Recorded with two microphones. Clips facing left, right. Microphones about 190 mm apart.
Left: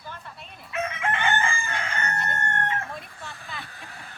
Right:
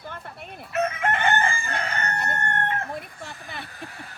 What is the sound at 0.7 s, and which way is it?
Chicken, 40° right (ahead or behind).